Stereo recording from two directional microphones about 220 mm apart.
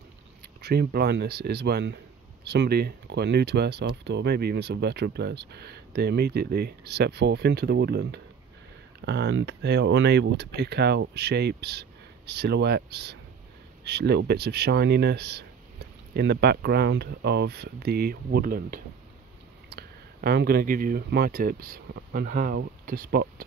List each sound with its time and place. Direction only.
0.6 s speech: 45° right (ahead or behind)